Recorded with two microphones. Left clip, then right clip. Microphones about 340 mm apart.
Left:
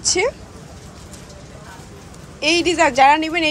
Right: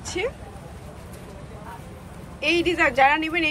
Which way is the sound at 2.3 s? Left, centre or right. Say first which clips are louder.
Left 5 dB; centre.